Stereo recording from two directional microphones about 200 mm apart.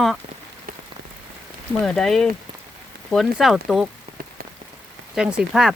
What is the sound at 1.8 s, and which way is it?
Speech, centre (ahead or behind).